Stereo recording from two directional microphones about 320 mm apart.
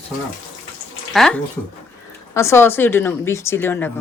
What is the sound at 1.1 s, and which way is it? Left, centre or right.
Speech, centre.